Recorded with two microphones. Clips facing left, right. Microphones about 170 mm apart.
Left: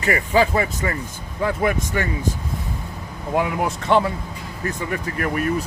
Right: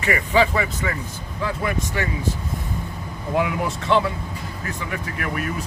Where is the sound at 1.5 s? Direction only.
50° left (ahead or behind).